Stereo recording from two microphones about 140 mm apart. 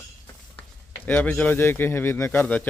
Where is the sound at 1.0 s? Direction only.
10° left (ahead or behind).